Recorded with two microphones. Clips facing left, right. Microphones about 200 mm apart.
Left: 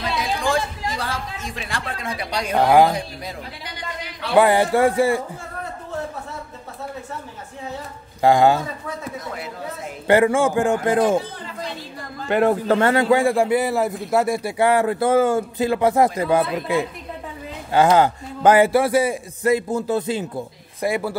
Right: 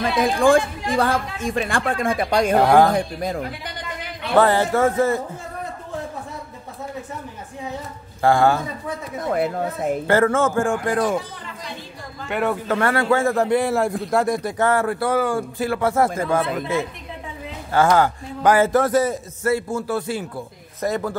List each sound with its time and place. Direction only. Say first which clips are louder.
0.0 s a woman's voice: right 6 dB; 50° right (ahead or behind)
2.6 s speech: left 2 dB; 5° left (ahead or behind)
2.9 s a woman's voice: right 6 dB; 50° right (ahead or behind)
4.4 s a man's voice: left 1 dB; 15° left (ahead or behind)
8.2 s a man's voice: left 2 dB; 15° left (ahead or behind)
9.2 s a woman's voice: right 9 dB; 55° right (ahead or behind)
10.0 s a man's voice: left 3 dB; 15° left (ahead or behind)
12.3 s a man's voice: left 5 dB; 35° left (ahead or behind)
18.7 s a man's voice: even; 10° left (ahead or behind)